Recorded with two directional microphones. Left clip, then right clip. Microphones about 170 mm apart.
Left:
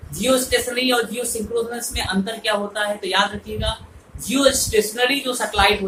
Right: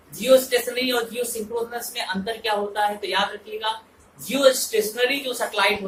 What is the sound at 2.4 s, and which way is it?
Speech, 20° left (ahead or behind).